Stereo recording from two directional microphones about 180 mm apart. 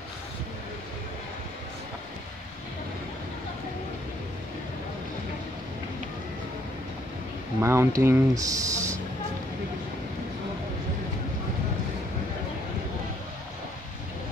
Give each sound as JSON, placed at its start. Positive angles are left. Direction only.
{"t": 7.6, "sound": "speech", "side_deg": -15}